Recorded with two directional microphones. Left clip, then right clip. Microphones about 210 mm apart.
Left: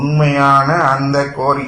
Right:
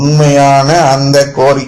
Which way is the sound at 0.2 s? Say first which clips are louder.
Right 4 dB; 35° right (ahead or behind).